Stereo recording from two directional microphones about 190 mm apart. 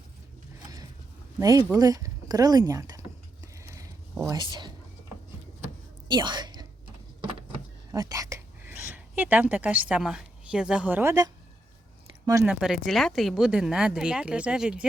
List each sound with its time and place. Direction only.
1.4 s speech: 15° right (ahead or behind)
3.4 s a sound: 15° right (ahead or behind)
6.1 s whispering: 25° right (ahead or behind)
7.9 s a woman's voice: 20° right (ahead or behind)
12.5 s speech: 5° right (ahead or behind)